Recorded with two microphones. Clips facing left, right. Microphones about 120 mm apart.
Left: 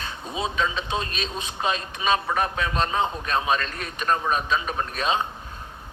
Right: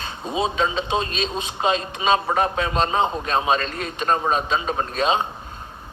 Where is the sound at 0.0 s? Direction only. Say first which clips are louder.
Right 5 dB; 25° right (ahead or behind).